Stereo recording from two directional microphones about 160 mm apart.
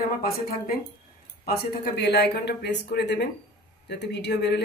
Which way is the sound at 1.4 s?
80° left.